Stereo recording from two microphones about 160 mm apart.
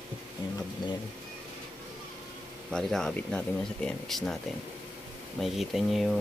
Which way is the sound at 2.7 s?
5° left (ahead or behind).